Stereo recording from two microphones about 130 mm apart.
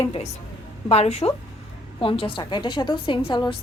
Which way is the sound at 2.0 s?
45° left (ahead or behind).